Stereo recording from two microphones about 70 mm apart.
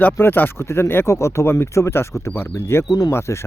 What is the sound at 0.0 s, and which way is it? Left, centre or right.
Speech, left.